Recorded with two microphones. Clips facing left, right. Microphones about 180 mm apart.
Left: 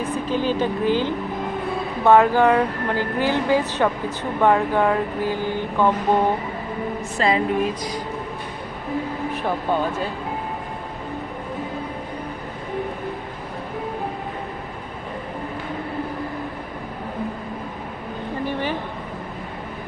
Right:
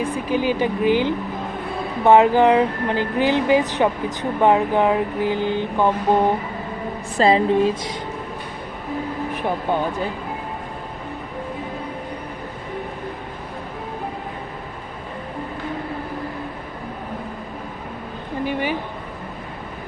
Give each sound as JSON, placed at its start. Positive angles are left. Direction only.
{"t": 0.0, "sound": "speech", "side_deg": -10}
{"t": 7.2, "sound": "speech", "side_deg": -30}
{"t": 18.4, "sound": "a sound", "side_deg": -15}